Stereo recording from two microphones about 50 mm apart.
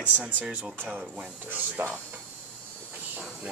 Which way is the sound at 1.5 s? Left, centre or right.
Right.